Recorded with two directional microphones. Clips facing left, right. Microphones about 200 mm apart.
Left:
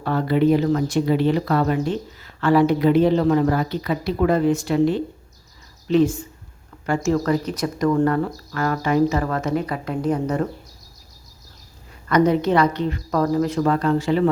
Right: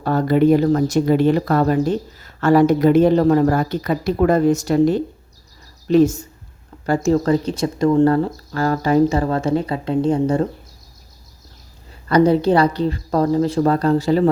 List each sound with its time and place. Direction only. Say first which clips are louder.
0.0 s speech: right 3 dB; 40° right (ahead or behind)
12.0 s speech: right 3 dB; 30° right (ahead or behind)